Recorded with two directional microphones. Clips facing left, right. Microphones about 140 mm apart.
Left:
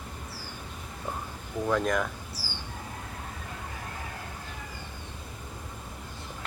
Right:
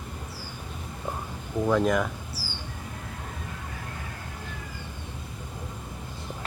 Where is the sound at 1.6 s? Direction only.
5° right (ahead or behind).